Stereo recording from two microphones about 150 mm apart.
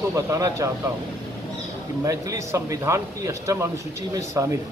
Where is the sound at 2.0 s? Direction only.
20° right (ahead or behind).